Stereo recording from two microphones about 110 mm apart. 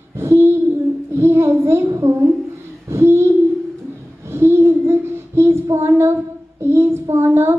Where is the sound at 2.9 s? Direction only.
25° right (ahead or behind).